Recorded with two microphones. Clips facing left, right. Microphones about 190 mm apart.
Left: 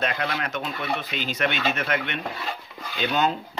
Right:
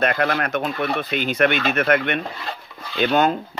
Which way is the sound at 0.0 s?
55° right (ahead or behind).